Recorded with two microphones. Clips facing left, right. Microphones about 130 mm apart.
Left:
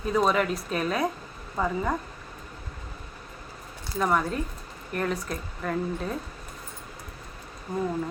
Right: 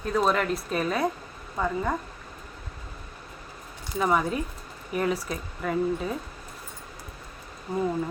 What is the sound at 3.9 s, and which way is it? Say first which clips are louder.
Speech: right 1 dB; 5° right (ahead or behind).